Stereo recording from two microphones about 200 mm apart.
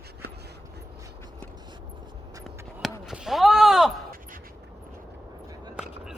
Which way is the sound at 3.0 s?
Centre (ahead or behind).